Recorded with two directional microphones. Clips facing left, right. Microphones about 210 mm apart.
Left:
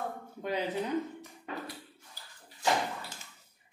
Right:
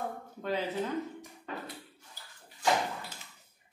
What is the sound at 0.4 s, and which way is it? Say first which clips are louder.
Speech: even; 15° left (ahead or behind).